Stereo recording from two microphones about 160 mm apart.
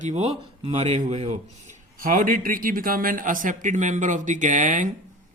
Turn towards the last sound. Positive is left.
turn(degrees=-55)  # may be behind; listen again after turning